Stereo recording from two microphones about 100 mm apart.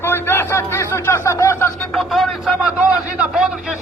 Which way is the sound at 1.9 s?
Centre (ahead or behind).